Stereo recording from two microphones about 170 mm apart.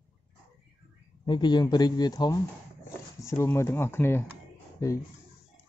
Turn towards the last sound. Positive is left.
turn(degrees=20)  # may be behind; listen again after turning